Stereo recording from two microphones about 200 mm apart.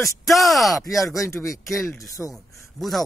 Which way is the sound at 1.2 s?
15° left (ahead or behind).